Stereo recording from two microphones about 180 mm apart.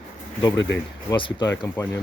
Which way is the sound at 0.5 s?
90° left.